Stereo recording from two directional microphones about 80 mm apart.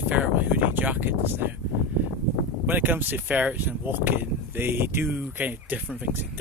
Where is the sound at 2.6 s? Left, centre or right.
Right.